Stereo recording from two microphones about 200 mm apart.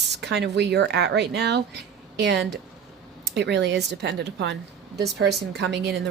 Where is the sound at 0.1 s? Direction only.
60° right (ahead or behind).